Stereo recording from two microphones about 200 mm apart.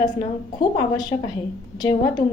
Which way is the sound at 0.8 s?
20° left (ahead or behind).